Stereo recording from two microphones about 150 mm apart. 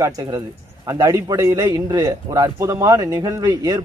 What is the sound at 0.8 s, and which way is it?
A man's voice, 20° right (ahead or behind).